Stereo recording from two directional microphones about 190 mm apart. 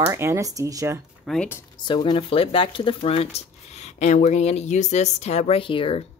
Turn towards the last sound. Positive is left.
turn(degrees=30)  # may be behind; listen again after turning